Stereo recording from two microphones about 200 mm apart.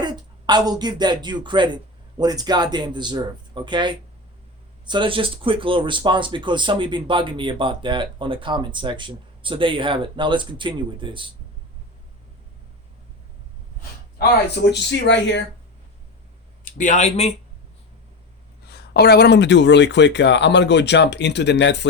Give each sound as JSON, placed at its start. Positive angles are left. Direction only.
{"t": 0.0, "sound": "speech", "side_deg": -20}
{"t": 14.2, "sound": "speech", "side_deg": 60}
{"t": 16.7, "sound": "speech", "side_deg": 40}
{"t": 18.7, "sound": "speech", "side_deg": 55}